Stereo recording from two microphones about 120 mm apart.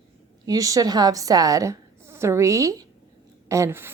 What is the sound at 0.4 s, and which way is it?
A woman's voice, 30° right (ahead or behind).